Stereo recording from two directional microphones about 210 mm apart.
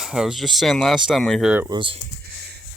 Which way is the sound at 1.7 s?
25° right (ahead or behind).